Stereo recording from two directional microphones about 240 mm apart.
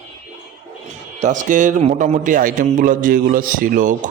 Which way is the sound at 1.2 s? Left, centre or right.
Right.